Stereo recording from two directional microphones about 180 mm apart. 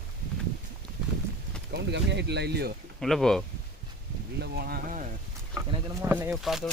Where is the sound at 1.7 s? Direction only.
70° right (ahead or behind).